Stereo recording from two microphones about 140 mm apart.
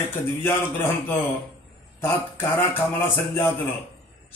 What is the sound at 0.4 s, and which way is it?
A man's voice, 15° left (ahead or behind).